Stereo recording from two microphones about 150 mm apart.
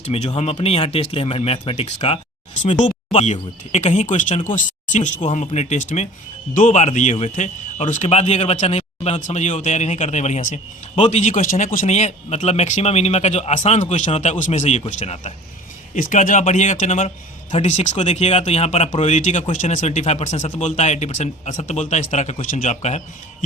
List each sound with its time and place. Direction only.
0.0 s speech: 45° left (ahead or behind)
2.7 s speech: 50° left (ahead or behind)
16.0 s speech: 60° left (ahead or behind)